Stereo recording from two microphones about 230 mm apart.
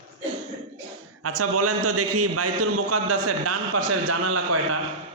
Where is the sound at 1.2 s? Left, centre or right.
Right.